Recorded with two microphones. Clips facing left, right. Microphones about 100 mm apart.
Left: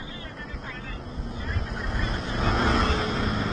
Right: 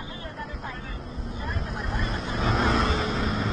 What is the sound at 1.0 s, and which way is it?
Vehicle, centre (ahead or behind).